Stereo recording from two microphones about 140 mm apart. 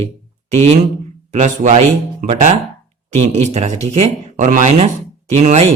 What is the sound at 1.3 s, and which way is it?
Speech, 55° right (ahead or behind).